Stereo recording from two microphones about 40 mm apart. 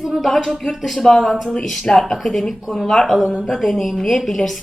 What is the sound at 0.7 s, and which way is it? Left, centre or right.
A woman's voice, centre.